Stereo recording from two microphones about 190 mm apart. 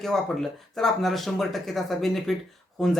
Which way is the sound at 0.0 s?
Centre (ahead or behind).